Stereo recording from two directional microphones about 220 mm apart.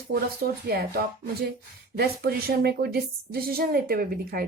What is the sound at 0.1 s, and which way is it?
Speech, 45° right (ahead or behind).